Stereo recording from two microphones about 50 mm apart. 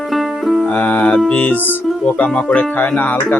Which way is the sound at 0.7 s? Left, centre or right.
Left.